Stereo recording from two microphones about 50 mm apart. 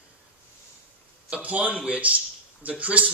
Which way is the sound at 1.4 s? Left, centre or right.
Right.